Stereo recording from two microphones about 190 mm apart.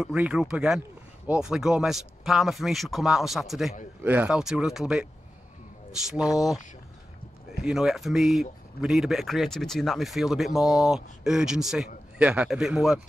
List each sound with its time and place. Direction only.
0.0 s speech: 5° right (ahead or behind)
6.0 s speech: 5° right (ahead or behind)
7.6 s speech: centre (ahead or behind)